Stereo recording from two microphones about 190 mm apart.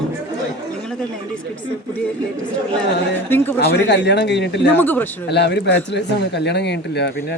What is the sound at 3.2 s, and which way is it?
Speech, 10° left (ahead or behind).